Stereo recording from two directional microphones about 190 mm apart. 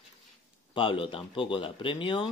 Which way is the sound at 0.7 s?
25° left (ahead or behind).